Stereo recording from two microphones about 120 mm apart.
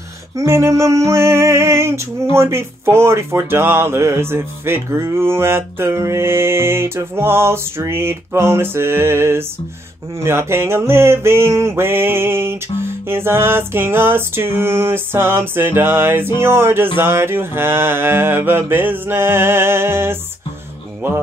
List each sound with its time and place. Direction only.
0.4 s female singing: 25° right (ahead or behind)
2.3 s speech: 20° right (ahead or behind)